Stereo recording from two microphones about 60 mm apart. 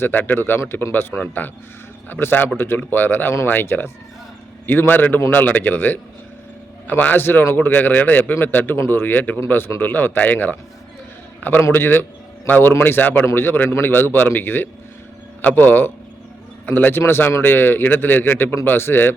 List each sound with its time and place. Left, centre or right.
0.0 s a man's voice: left
11.7 s a man's voice: left